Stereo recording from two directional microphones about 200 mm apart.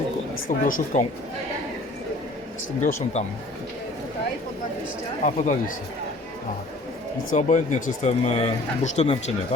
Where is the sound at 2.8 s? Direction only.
35° left (ahead or behind).